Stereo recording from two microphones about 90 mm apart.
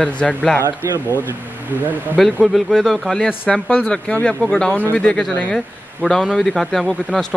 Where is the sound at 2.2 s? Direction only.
Centre (ahead or behind).